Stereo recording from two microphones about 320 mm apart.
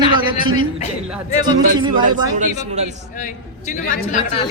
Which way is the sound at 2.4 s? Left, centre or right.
Right.